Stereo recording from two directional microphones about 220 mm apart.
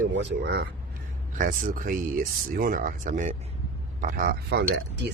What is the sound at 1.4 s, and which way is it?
Speech, 35° right (ahead or behind).